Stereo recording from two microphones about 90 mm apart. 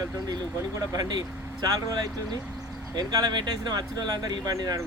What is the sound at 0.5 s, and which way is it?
Speech, 35° right (ahead or behind).